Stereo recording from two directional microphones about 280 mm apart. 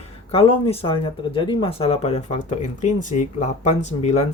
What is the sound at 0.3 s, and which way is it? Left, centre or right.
Speech, left.